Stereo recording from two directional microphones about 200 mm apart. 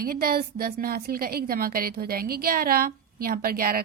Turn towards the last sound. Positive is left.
turn(degrees=-45)  # may be behind; listen again after turning